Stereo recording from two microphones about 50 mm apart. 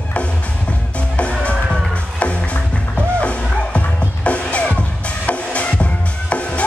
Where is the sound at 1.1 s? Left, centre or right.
Left.